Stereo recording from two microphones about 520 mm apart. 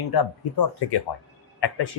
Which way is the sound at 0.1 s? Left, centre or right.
Left.